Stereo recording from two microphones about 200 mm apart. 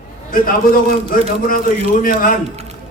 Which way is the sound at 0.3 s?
45° left (ahead or behind).